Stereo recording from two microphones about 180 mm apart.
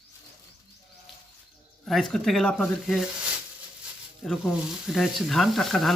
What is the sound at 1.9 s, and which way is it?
Speech, centre (ahead or behind).